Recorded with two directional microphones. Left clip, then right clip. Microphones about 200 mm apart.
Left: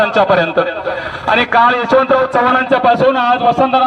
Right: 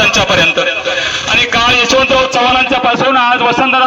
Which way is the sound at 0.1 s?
50° left (ahead or behind).